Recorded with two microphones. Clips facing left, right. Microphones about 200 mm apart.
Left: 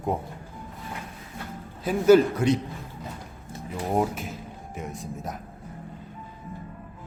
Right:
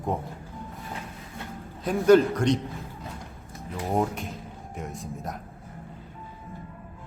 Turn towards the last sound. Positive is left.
turn(degrees=0)  # may be behind; listen again after turning